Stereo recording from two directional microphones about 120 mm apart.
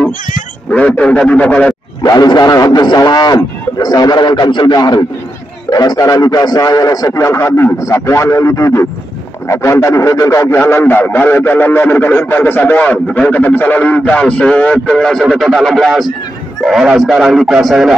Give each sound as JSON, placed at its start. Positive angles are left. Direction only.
{"t": 0.7, "sound": "speech", "side_deg": 10}
{"t": 2.0, "sound": "a man's voice", "side_deg": 30}